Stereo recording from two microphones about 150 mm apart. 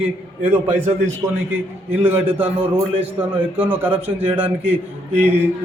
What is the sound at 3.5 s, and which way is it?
Speech, 10° right (ahead or behind).